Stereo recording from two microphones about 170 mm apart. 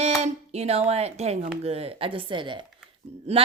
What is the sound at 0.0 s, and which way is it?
A woman's voice, 40° right (ahead or behind).